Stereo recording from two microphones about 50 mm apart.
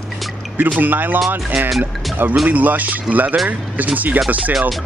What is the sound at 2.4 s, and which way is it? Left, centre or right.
Speech, right.